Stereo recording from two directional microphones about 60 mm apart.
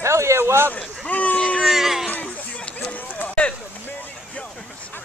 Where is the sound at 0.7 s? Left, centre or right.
Left.